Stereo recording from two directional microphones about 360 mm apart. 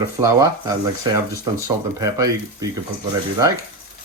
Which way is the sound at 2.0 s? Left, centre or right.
Centre.